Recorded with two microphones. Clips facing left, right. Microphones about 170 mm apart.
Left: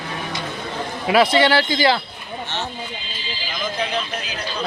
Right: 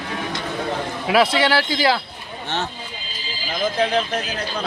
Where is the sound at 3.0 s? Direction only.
40° right (ahead or behind).